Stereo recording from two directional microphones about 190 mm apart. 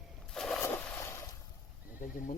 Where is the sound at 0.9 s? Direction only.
15° left (ahead or behind).